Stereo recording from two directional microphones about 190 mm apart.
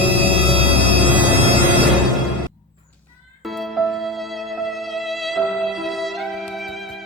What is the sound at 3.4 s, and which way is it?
Music, centre (ahead or behind).